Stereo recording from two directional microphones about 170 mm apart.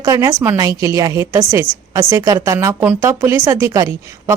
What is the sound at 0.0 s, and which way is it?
A woman's voice, 20° right (ahead or behind).